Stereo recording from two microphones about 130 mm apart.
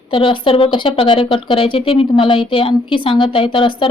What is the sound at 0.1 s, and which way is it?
A woman's voice, 45° left (ahead or behind).